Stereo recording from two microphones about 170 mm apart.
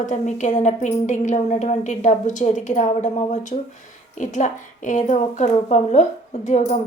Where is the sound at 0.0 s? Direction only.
45° left (ahead or behind).